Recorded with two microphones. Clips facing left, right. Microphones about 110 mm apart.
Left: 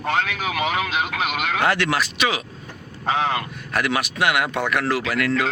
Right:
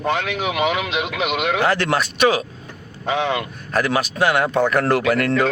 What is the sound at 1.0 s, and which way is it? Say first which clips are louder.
Speech: right 3 dB; 90° right.